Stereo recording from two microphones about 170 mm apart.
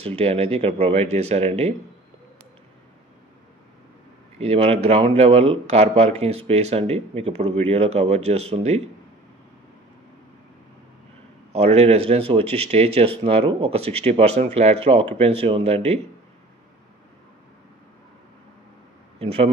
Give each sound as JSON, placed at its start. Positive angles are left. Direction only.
{"t": 0.0, "sound": "speech", "side_deg": -35}
{"t": 4.4, "sound": "speech", "side_deg": -35}
{"t": 11.5, "sound": "speech", "side_deg": -40}
{"t": 19.1, "sound": "a man's voice", "side_deg": -35}